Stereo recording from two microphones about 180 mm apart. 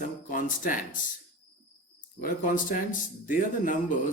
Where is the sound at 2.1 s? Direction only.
45° left (ahead or behind).